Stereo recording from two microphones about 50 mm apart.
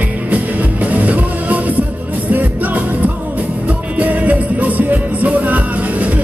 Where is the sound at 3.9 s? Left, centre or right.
Right.